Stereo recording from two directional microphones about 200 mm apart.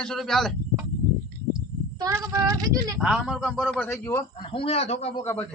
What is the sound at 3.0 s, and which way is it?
A man's voice, centre (ahead or behind).